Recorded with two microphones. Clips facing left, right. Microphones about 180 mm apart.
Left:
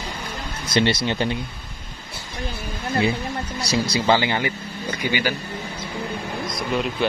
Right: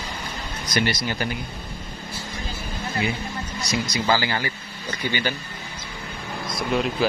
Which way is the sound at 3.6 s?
30° left (ahead or behind).